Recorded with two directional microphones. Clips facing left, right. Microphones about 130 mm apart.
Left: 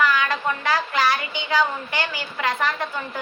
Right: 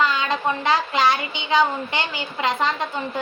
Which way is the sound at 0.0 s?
20° right (ahead or behind).